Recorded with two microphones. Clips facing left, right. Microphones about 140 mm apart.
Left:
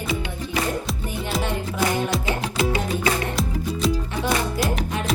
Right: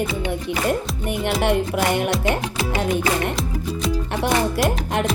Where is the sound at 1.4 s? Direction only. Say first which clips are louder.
Right 5 dB; 70° right (ahead or behind).